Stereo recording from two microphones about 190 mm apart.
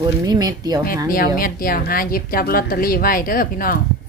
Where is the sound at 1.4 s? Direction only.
50° left (ahead or behind).